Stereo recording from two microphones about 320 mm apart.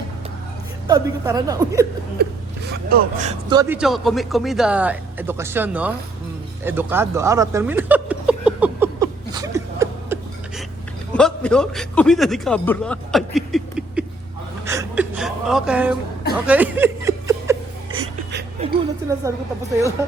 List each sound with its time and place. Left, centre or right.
0.9 s a woman's voice: centre
2.2 s speech: right
3.6 s speech: centre
6.7 s a sound: centre
11.1 s a man's voice: centre
14.6 s gasp: centre
16.5 s chuckle: centre
18.6 s music: centre